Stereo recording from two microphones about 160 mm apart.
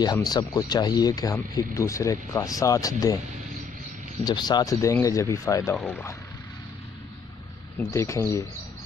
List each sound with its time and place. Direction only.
0.0 s speech: 25° left (ahead or behind)
4.2 s speech: 25° left (ahead or behind)
5.8 s speech: 5° left (ahead or behind)
7.9 s speech: 15° left (ahead or behind)